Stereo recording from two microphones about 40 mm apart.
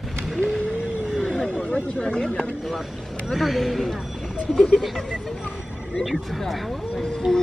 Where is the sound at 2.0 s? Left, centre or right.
Left.